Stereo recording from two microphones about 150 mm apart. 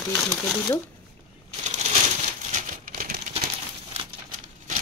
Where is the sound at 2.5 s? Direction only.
60° right (ahead or behind).